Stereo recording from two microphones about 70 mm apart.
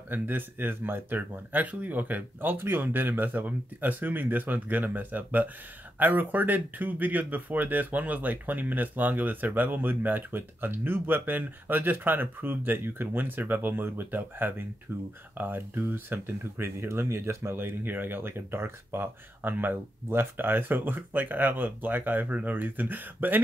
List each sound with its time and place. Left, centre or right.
0.1 s speech: right